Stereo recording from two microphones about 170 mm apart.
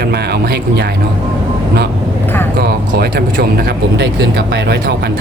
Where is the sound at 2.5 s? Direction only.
70° right (ahead or behind).